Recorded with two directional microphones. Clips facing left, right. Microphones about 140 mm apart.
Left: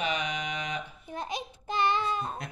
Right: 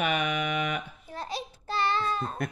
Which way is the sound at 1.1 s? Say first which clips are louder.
Even; 20° left (ahead or behind).